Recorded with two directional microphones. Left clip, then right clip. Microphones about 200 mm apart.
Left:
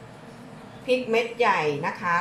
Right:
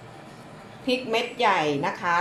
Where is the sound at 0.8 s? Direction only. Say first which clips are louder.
Left 2 dB; 35° right (ahead or behind).